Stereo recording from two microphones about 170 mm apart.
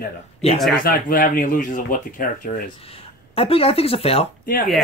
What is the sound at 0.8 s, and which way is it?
Speech, 55° left (ahead or behind).